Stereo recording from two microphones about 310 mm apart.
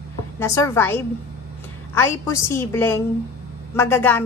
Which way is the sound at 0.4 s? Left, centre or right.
Centre.